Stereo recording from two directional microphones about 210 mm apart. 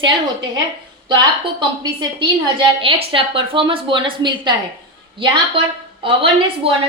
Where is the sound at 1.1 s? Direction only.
20° right (ahead or behind).